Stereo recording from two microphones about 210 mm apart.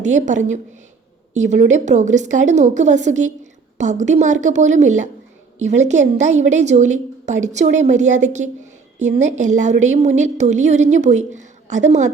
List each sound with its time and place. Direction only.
0.0 s a woman's voice: 35° right (ahead or behind)